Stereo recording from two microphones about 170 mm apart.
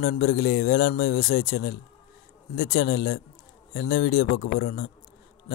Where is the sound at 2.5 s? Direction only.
60° left (ahead or behind).